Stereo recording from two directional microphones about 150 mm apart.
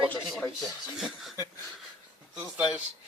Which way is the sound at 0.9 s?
Centre (ahead or behind).